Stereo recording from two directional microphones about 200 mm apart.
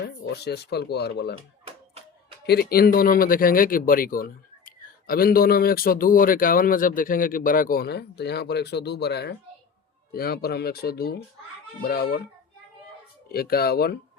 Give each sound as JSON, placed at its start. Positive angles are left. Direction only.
{"t": 0.3, "sound": "speech", "side_deg": 55}
{"t": 2.5, "sound": "speech", "side_deg": 50}
{"t": 13.2, "sound": "speech", "side_deg": 50}